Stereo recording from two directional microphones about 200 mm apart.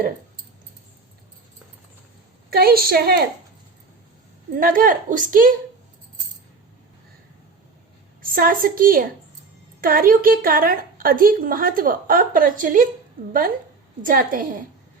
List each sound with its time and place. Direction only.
2.5 s a woman's voice: 50° right (ahead or behind)
4.5 s a woman's voice: 45° right (ahead or behind)
8.2 s a woman's voice: 45° right (ahead or behind)
14.0 s a woman's voice: 45° right (ahead or behind)